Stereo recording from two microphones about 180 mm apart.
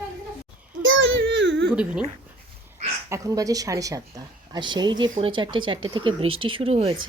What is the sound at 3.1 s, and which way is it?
Speech, 20° right (ahead or behind).